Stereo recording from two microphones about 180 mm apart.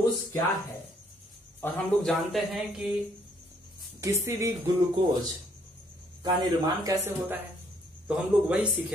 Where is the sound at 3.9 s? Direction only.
15° right (ahead or behind).